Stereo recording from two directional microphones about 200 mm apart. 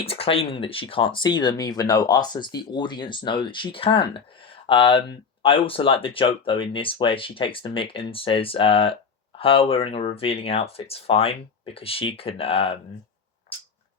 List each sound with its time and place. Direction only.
0.0 s speech: 30° left (ahead or behind)